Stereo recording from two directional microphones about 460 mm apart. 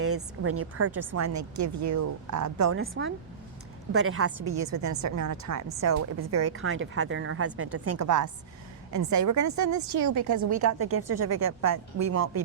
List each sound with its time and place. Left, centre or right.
0.0 s a woman's voice: right